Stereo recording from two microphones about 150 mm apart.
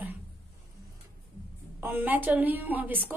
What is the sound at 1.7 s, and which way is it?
A woman's voice, 15° right (ahead or behind).